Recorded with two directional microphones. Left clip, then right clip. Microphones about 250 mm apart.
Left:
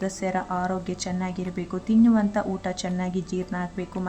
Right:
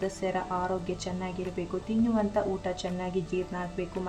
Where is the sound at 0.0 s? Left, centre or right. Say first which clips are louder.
Left 3 dB; left.